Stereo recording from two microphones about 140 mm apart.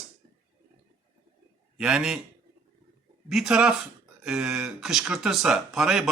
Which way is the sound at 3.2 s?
5° right (ahead or behind).